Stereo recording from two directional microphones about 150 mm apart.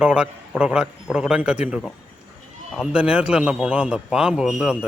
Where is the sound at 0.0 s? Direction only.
5° right (ahead or behind).